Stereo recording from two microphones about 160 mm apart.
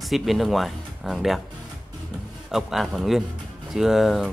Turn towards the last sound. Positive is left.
turn(degrees=0)  # may be behind; listen again after turning